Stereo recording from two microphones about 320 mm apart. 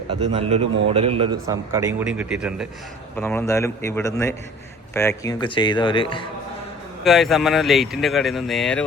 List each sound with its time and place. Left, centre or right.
0.1 s a man's voice: centre
7.0 s speech: centre